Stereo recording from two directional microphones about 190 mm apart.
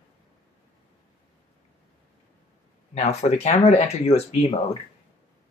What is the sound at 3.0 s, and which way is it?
Speech, 35° left (ahead or behind).